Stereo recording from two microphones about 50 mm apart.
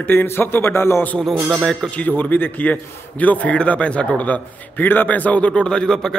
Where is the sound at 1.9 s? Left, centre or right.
Left.